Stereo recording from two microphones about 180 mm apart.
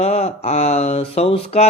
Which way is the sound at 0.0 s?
35° left (ahead or behind).